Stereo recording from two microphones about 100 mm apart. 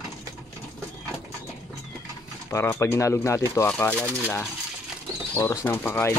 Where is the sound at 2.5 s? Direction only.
25° left (ahead or behind).